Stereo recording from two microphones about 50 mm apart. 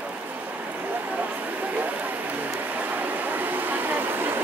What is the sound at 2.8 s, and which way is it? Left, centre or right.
Vehicle, right.